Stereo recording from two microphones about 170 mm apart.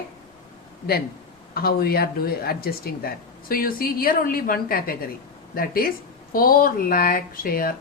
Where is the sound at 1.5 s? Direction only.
65° left (ahead or behind).